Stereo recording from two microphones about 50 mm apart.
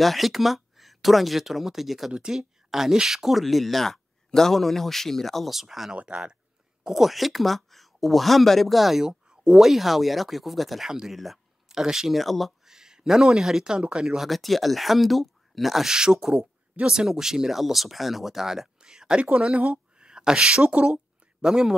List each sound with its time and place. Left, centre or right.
0.0 s speech: centre
5.9 s speech: right
6.8 s speech: centre
9.0 s speech: centre
11.1 s a sound: centre
11.8 s speech: centre
12.6 s speech: centre
15.9 s speech: centre
18.8 s a sound: centre
19.2 s a woman's voice: right